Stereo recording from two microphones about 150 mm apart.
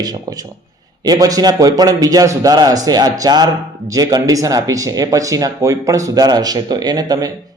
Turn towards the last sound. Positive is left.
turn(degrees=-25)  # may be behind; listen again after turning